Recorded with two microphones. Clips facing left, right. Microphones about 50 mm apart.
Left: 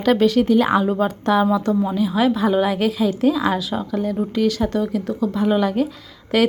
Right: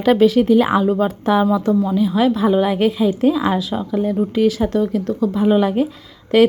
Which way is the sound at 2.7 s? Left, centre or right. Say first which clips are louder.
Right 3 dB; centre.